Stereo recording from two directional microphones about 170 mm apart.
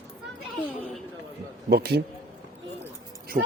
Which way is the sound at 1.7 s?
70° right (ahead or behind).